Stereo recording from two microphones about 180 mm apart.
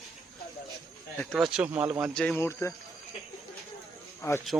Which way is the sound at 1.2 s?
Centre (ahead or behind).